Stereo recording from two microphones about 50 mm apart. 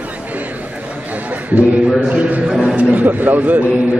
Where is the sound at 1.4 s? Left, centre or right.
Right.